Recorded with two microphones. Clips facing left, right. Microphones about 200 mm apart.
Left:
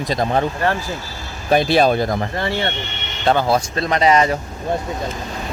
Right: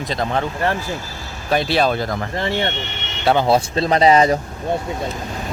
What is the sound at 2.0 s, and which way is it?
Speech, 20° left (ahead or behind).